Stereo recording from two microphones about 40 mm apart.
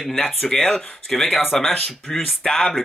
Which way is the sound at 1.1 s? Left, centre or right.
Centre.